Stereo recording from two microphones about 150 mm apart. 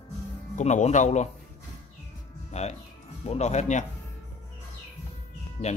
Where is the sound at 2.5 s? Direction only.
45° left (ahead or behind).